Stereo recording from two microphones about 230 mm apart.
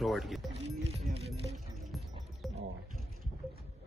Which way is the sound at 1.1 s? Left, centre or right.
Right.